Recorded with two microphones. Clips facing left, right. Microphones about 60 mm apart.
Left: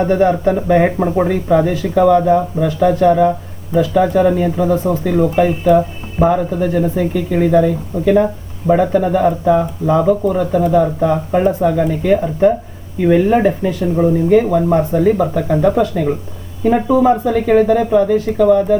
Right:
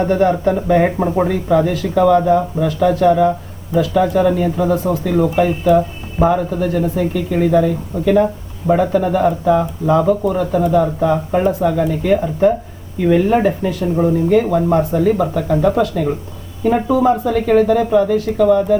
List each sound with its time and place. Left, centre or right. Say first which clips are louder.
0.0 s speech: left 1 dB; centre